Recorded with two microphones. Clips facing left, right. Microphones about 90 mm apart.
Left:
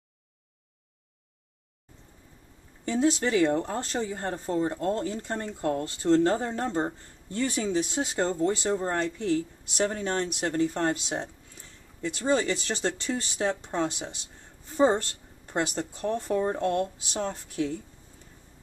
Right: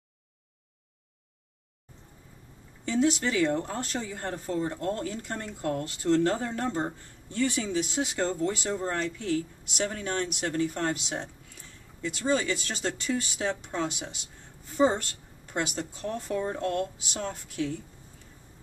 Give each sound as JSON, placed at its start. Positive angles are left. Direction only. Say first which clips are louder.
{"t": 3.0, "sound": "speech", "louder": "left 2 dB", "side_deg": 25}
{"t": 15.4, "sound": "speech", "louder": "left 2 dB", "side_deg": 25}